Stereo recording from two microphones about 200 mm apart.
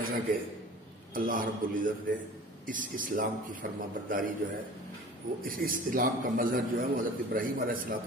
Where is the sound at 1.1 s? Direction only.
45° right (ahead or behind).